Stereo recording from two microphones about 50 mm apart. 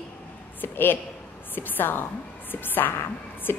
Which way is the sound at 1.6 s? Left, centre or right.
Left.